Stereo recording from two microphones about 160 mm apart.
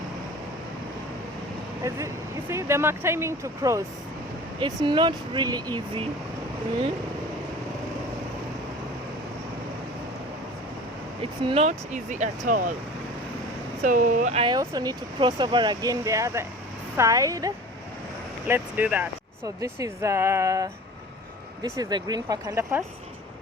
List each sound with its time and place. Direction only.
1.8 s speech: 20° right (ahead or behind)
4.6 s speech: 30° right (ahead or behind)
11.2 s speech: 35° right (ahead or behind); by 12.7 s 55° right (ahead or behind)
13.8 s speech: 55° right (ahead or behind)
14.3 s speech: 25° right (ahead or behind)